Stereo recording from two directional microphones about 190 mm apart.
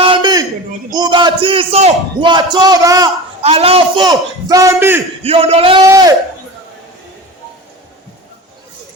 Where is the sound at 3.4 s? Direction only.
30° right (ahead or behind); by 5.0 s 15° right (ahead or behind).